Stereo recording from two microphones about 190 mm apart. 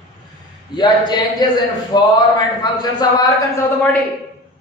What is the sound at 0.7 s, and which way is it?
Speech, 20° left (ahead or behind).